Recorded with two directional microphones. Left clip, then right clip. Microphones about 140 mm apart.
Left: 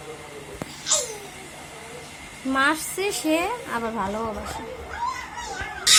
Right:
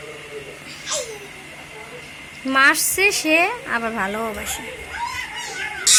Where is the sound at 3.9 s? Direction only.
35° right (ahead or behind).